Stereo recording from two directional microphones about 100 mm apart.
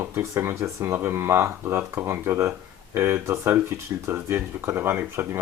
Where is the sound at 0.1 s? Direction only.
25° right (ahead or behind).